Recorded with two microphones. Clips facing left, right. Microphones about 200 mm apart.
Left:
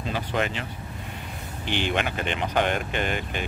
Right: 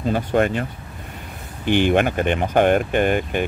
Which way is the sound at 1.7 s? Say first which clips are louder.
Right 10 dB; 50° right (ahead or behind).